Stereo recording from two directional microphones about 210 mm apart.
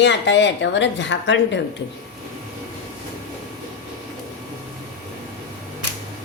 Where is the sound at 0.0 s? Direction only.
55° left (ahead or behind).